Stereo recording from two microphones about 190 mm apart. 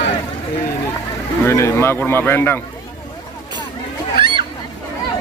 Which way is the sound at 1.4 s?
15° left (ahead or behind).